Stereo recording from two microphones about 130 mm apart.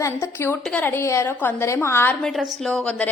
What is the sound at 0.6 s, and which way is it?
Speech, 5° left (ahead or behind).